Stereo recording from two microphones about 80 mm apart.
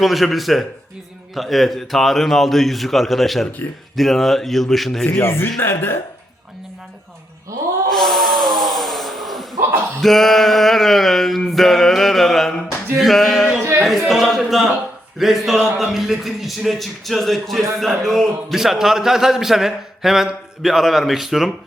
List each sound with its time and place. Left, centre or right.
0.0 s a man's voice: centre
5.2 s speech: left
7.9 s a sound: centre
10.0 s a man's voice: centre